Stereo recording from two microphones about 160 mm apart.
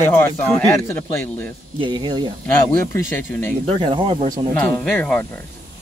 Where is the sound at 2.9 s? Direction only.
10° left (ahead or behind).